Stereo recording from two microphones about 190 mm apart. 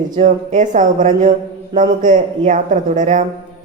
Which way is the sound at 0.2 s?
40° right (ahead or behind).